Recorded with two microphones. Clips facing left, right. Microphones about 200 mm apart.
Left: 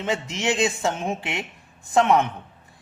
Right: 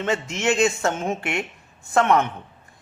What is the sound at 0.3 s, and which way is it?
Speech, 15° left (ahead or behind).